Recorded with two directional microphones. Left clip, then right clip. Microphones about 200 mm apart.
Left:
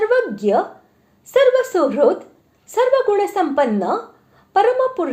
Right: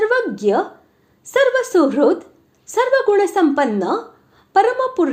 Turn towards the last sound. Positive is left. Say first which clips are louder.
# even
turn(degrees=-25)  # may be behind; listen again after turning